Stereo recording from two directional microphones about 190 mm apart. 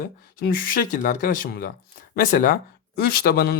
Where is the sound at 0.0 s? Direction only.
50° left (ahead or behind).